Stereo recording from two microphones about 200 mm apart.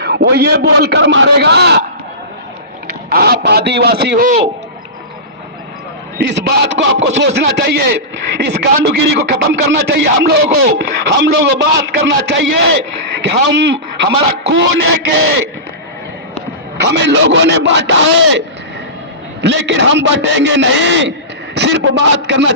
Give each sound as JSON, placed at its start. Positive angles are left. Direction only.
{"t": 0.0, "sound": "speech", "side_deg": -55}
{"t": 3.1, "sound": "speech", "side_deg": -50}
{"t": 6.2, "sound": "speech", "side_deg": -60}
{"t": 14.0, "sound": "speech", "side_deg": -60}
{"t": 16.7, "sound": "speech", "side_deg": -55}